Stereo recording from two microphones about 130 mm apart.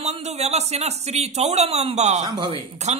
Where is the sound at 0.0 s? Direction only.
55° right (ahead or behind).